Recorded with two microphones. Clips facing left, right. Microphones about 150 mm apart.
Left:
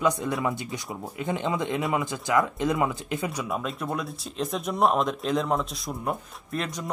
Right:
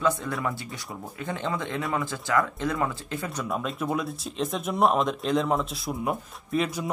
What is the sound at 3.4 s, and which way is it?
Speech, centre (ahead or behind).